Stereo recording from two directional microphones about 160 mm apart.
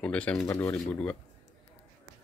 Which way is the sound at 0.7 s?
5° left (ahead or behind).